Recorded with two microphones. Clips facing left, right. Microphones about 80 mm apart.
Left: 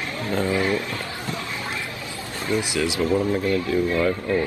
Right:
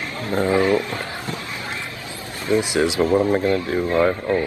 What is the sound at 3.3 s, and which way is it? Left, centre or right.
Speech, right.